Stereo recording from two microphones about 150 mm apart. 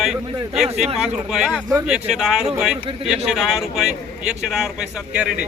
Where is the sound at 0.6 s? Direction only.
Centre (ahead or behind).